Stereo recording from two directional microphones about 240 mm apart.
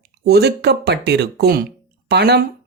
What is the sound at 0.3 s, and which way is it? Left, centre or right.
Speech, right.